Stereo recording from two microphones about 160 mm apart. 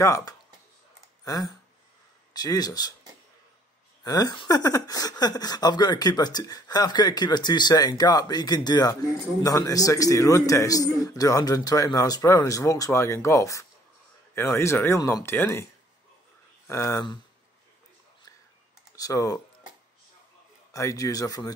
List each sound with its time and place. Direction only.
0.0 s speech: 20° left (ahead or behind)
4.0 s speech: 25° left (ahead or behind)
16.6 s speech: 20° left (ahead or behind)
18.9 s speech: 20° left (ahead or behind)
20.7 s speech: 20° left (ahead or behind)